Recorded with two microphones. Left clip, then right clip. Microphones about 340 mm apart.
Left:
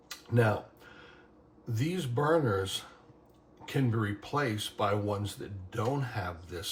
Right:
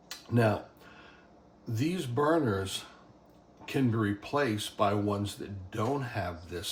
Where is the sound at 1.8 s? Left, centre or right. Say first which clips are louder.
Right 2 dB; centre.